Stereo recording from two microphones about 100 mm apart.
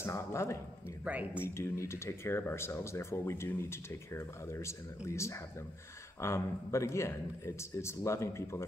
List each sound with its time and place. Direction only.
0.0 s speech: 30° left (ahead or behind)
1.0 s speech: 15° right (ahead or behind)
1.4 s speech: 30° left (ahead or behind)